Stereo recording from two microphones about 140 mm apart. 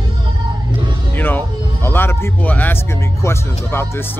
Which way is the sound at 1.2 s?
15° left (ahead or behind).